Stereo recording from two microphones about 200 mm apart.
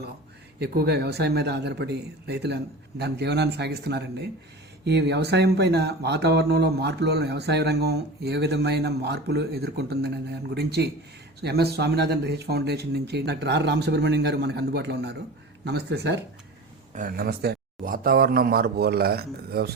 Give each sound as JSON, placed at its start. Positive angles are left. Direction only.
{"t": 0.6, "sound": "speech", "side_deg": -50}
{"t": 16.9, "sound": "speech", "side_deg": -45}